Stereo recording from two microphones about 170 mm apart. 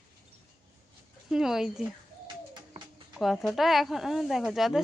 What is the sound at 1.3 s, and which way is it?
Speech, 5° right (ahead or behind).